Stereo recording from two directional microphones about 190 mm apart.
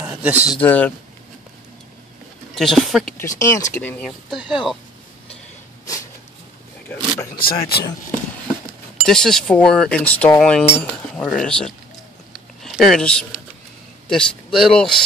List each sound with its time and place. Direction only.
0.0 s a sound: 5° right (ahead or behind)
0.6 s speech: 10° left (ahead or behind)
2.5 s cutlery: centre (ahead or behind)
3.4 s speech: 15° left (ahead or behind)
4.0 s cutlery: centre (ahead or behind)
7.3 s speech: 50° left (ahead or behind)
9.0 s cutlery: 5° left (ahead or behind)
12.3 s a sound: centre (ahead or behind)
14.0 s a man's voice: centre (ahead or behind)